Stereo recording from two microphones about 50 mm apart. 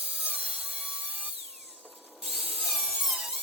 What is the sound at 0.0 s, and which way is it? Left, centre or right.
Sawing, right.